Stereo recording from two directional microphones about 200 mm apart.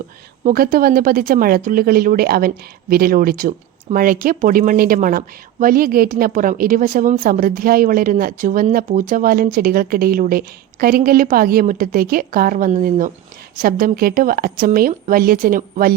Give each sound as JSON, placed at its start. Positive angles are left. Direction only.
{"t": 0.4, "sound": "a woman's voice", "side_deg": -45}